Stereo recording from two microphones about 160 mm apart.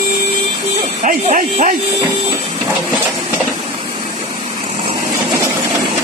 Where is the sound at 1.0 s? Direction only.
55° right (ahead or behind).